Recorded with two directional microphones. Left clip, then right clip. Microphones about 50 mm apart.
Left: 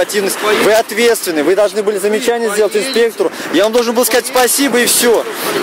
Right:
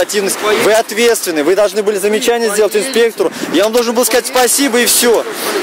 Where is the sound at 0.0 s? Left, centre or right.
Centre.